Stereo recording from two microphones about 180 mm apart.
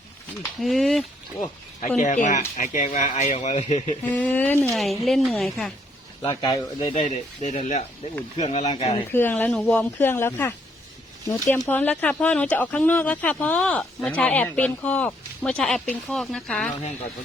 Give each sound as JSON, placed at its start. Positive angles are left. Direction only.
{"t": 0.6, "sound": "a woman's voice", "side_deg": 0}
{"t": 2.0, "sound": "speech", "side_deg": 45}
{"t": 4.0, "sound": "a woman's voice", "side_deg": 10}
{"t": 6.2, "sound": "speech", "side_deg": 20}
{"t": 6.9, "sound": "speech", "side_deg": 40}
{"t": 9.1, "sound": "speech", "side_deg": 10}
{"t": 11.5, "sound": "speech", "side_deg": 10}